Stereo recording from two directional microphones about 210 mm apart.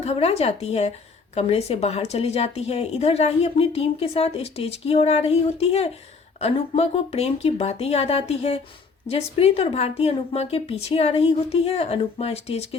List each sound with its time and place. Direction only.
0.0 s a woman's voice: 30° left (ahead or behind)